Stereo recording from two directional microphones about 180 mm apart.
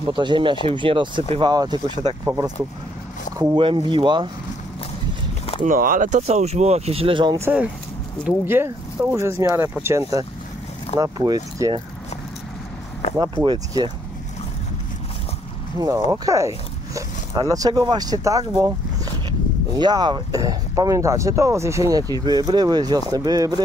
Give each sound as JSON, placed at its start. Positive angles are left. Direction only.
{"t": 0.1, "sound": "speech", "side_deg": -25}
{"t": 3.3, "sound": "speech", "side_deg": -25}
{"t": 5.6, "sound": "speech", "side_deg": -50}
{"t": 7.4, "sound": "speech", "side_deg": -5}
{"t": 13.2, "sound": "speech", "side_deg": -20}
{"t": 16.1, "sound": "speech", "side_deg": -15}
{"t": 19.8, "sound": "speech", "side_deg": -25}